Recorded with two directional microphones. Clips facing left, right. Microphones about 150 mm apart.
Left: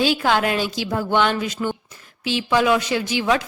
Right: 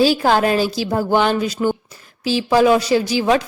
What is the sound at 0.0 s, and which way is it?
A woman's voice, 35° right (ahead or behind).